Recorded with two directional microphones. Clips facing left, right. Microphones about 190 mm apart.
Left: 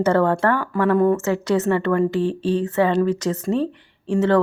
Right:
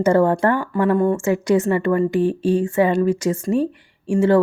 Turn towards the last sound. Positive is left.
turn(degrees=-10)  # may be behind; listen again after turning